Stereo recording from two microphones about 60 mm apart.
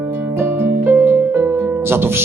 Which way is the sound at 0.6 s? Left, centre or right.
Right.